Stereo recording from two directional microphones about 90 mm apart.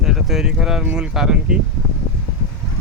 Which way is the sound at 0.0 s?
5° right (ahead or behind).